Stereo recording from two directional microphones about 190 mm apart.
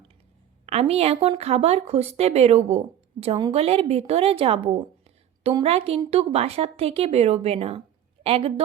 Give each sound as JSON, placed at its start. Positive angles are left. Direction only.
{"t": 0.6, "sound": "speech", "side_deg": -35}